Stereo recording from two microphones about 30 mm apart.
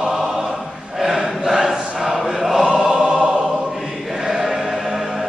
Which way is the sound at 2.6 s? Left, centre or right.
Right.